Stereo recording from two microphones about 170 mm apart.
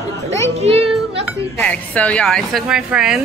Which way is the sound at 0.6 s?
35° right (ahead or behind).